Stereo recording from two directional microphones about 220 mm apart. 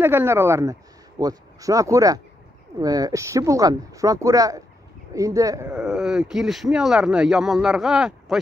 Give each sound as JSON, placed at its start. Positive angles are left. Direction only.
{"t": 0.0, "sound": "speech", "side_deg": -10}
{"t": 5.7, "sound": "speech", "side_deg": -5}